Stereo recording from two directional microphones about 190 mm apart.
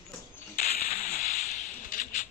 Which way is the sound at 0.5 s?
45° left (ahead or behind).